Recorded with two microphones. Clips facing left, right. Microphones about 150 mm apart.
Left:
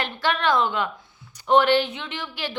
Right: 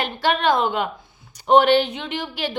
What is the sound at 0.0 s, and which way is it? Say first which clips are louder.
A woman's voice: right 3 dB; 15° right (ahead or behind).